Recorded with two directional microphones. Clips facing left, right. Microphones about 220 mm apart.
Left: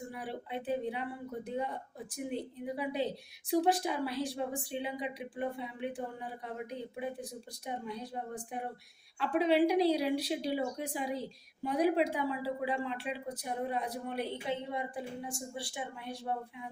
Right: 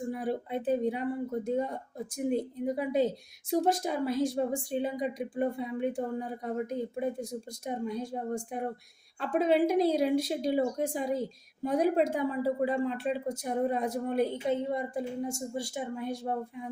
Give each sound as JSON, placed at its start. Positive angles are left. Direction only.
{"t": 0.1, "sound": "speech", "side_deg": -45}